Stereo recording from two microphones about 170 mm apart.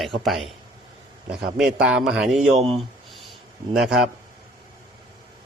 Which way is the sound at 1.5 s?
5° right (ahead or behind).